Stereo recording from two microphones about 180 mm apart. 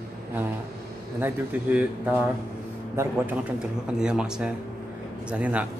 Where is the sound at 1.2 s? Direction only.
10° right (ahead or behind).